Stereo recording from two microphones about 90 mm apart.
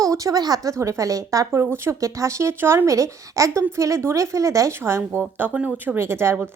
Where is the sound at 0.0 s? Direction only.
40° right (ahead or behind).